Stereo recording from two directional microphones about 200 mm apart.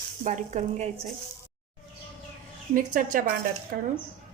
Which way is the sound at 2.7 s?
45° right (ahead or behind).